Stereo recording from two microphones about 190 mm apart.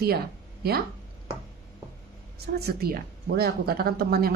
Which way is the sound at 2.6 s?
55° right (ahead or behind).